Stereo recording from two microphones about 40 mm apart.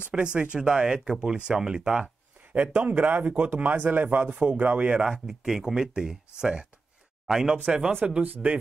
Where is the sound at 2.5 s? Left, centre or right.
Right.